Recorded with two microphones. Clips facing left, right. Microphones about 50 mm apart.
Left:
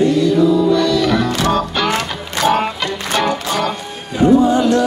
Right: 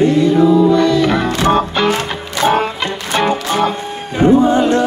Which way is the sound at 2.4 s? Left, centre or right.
Right.